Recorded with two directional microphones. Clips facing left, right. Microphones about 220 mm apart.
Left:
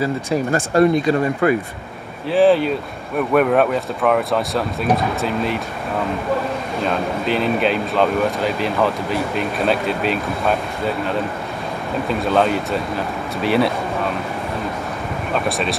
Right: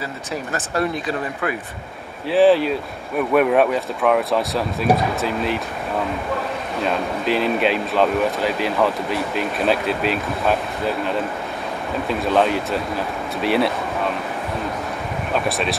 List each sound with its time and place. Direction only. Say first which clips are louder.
0.5 s speech: left 8 dB; 45° left (ahead or behind)
2.2 s speech: even; centre (ahead or behind)
6.8 s speech: left 1 dB; centre (ahead or behind)
15.3 s speech: left 1 dB; centre (ahead or behind)